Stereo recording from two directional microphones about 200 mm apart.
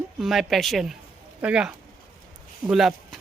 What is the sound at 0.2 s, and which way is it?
Speech, centre (ahead or behind).